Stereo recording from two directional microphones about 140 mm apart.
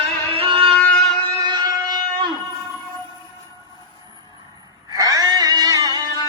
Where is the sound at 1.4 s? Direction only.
30° right (ahead or behind).